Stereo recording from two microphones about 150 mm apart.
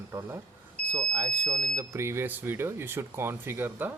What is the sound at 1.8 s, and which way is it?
Speech, 20° right (ahead or behind).